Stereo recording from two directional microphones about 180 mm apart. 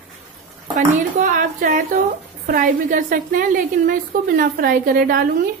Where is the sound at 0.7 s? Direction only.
45° right (ahead or behind).